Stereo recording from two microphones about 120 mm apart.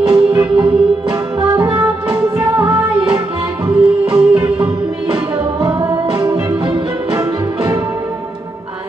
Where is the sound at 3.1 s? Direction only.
50° right (ahead or behind).